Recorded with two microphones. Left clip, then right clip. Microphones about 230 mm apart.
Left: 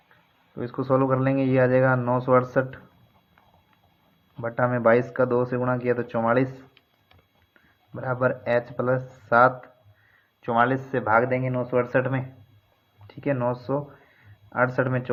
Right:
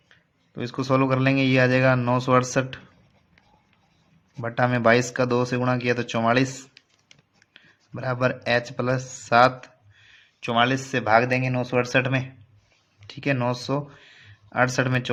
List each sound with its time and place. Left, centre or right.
0.5 s speech: right
4.4 s speech: right
7.5 s speech: right